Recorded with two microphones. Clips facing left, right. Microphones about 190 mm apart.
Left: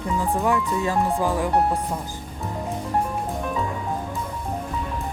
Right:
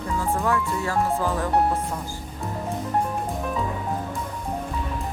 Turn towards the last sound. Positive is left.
turn(degrees=0)  # may be behind; listen again after turning